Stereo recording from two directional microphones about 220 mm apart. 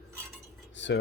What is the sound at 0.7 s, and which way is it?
Cutlery, 55° left (ahead or behind).